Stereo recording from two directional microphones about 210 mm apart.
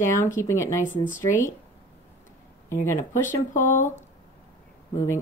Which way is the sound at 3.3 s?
35° left (ahead or behind).